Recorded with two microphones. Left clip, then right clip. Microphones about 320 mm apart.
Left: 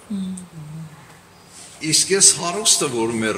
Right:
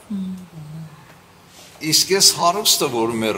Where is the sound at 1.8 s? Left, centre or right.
Centre.